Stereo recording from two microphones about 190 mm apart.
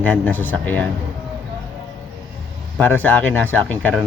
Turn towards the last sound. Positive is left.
turn(degrees=5)  # may be behind; listen again after turning